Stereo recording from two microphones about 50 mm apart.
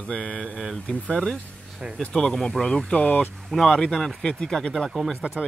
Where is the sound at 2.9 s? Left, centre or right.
Left.